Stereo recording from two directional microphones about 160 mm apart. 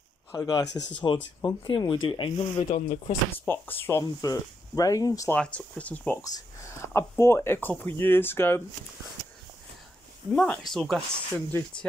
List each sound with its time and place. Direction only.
0.3 s speech: 25° left (ahead or behind)
0.7 s speech: 90° left
1.0 s speech: 30° left (ahead or behind)
3.1 s speech: 15° left (ahead or behind)
5.3 s speech: 10° left (ahead or behind)
10.3 s speech: 5° left (ahead or behind)